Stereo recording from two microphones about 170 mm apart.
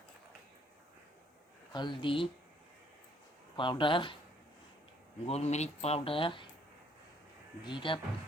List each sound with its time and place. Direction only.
1.7 s speech: 25° left (ahead or behind)
3.6 s speech: 30° left (ahead or behind)
5.2 s speech: 40° left (ahead or behind)
7.6 s speech: 30° left (ahead or behind)